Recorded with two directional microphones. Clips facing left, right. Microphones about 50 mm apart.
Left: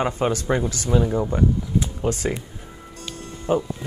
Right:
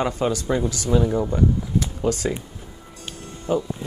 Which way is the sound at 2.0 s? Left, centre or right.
Left.